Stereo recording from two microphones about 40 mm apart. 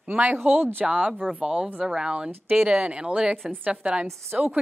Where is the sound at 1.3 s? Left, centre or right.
Right.